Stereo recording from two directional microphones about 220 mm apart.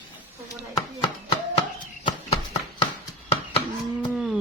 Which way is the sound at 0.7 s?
20° left (ahead or behind).